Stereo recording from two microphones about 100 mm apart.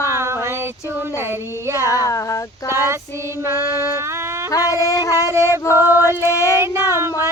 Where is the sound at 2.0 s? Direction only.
30° left (ahead or behind).